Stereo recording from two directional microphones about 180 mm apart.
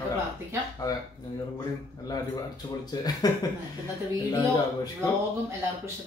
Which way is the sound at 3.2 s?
20° left (ahead or behind).